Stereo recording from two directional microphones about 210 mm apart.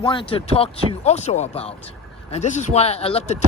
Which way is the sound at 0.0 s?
25° left (ahead or behind).